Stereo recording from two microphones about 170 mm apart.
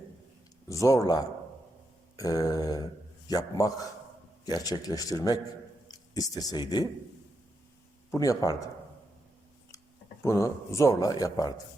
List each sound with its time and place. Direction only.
0.7 s speech: 20° left (ahead or behind)
8.1 s speech: 20° left (ahead or behind)
10.2 s speech: 20° left (ahead or behind)